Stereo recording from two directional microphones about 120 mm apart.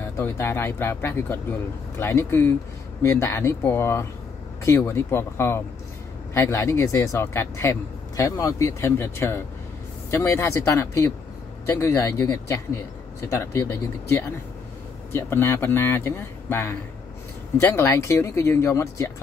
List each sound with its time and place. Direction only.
0.2 s speech: 20° left (ahead or behind)